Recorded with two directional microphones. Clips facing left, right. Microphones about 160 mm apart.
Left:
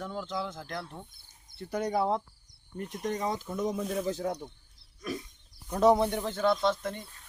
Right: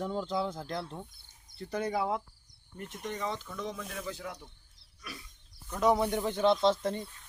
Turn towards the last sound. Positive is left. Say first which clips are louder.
# right 2 dB
turn(degrees=-30)  # may be behind; listen again after turning